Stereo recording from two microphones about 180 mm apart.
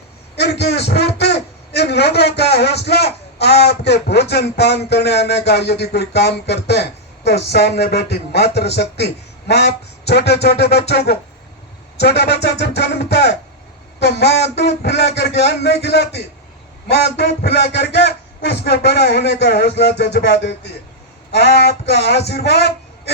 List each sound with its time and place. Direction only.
0.6 s a man's voice: 65° left (ahead or behind)